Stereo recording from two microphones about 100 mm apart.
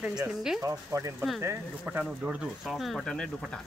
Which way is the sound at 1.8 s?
15° right (ahead or behind).